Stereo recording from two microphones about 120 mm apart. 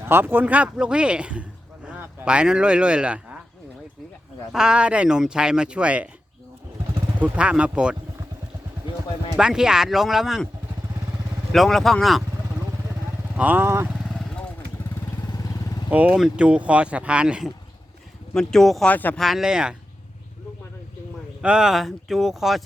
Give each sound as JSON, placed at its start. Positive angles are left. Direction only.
{"t": 0.0, "sound": "speech", "side_deg": -20}
{"t": 4.5, "sound": "speech", "side_deg": -5}
{"t": 7.2, "sound": "speech", "side_deg": -10}
{"t": 9.3, "sound": "speech", "side_deg": -5}
{"t": 11.5, "sound": "speech", "side_deg": 0}
{"t": 13.3, "sound": "speech", "side_deg": -15}
{"t": 15.9, "sound": "speech", "side_deg": -10}
{"t": 18.3, "sound": "speech", "side_deg": 5}
{"t": 18.9, "sound": "speech", "side_deg": 15}
{"t": 19.2, "sound": "speech", "side_deg": -5}
{"t": 21.4, "sound": "speech", "side_deg": -5}